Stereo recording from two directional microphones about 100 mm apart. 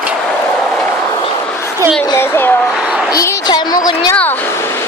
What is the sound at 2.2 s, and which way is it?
Speech, 20° left (ahead or behind).